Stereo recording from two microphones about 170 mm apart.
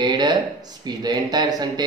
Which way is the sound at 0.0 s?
25° right (ahead or behind).